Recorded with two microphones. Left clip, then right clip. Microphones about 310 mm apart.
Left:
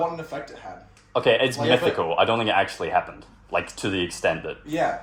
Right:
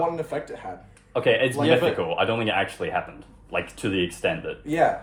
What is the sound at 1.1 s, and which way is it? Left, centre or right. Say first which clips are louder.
A man's voice: left 1 dB; left.